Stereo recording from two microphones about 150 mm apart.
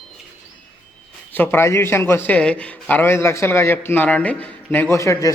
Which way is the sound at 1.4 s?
15° left (ahead or behind).